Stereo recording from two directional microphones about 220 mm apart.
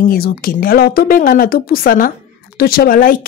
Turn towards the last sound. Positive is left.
turn(degrees=40)  # may be behind; listen again after turning